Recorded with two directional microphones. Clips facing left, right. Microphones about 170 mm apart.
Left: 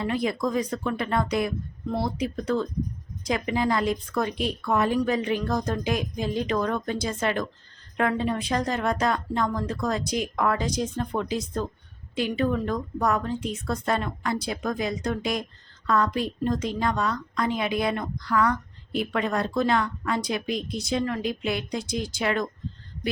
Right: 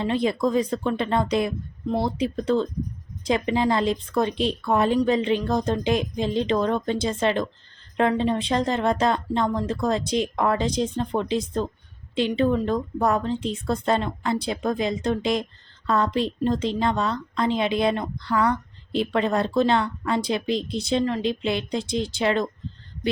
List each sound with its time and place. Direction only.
0.0 s a woman's voice: 25° right (ahead or behind)
12.6 s a woman's voice: 25° right (ahead or behind)